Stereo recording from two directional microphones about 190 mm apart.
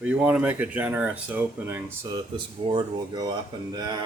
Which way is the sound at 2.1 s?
25° right (ahead or behind).